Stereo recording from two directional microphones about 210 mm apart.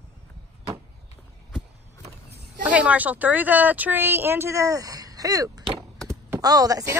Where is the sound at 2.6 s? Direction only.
5° right (ahead or behind).